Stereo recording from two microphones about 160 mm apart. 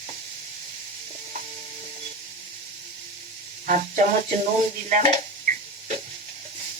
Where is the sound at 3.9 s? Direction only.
55° right (ahead or behind).